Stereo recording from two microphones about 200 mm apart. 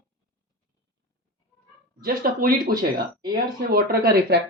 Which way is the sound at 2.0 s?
45° right (ahead or behind).